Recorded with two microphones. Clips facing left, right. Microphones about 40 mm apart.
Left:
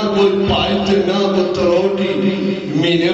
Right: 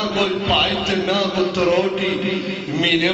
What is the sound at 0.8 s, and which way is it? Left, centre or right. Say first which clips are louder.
A man's voice: left 5 dB; right.